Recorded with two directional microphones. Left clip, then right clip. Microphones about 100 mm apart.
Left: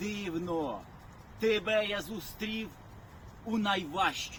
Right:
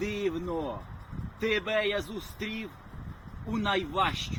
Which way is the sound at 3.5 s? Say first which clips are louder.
Right 2 dB; 50° left (ahead or behind).